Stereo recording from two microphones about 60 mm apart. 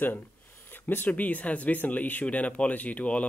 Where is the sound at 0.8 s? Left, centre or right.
Left.